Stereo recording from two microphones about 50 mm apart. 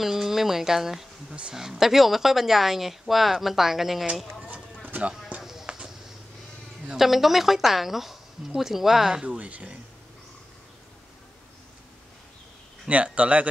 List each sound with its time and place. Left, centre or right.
0.0 s speech: centre
4.8 s a sound: right
5.4 s clip-clop: centre
7.0 s speech: centre
9.2 s speech: right
12.8 s speech: right